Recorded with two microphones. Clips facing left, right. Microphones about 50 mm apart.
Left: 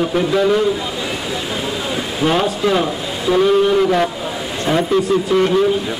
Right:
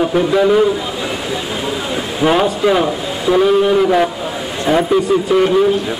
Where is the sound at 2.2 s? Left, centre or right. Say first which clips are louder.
Right 3 dB; centre.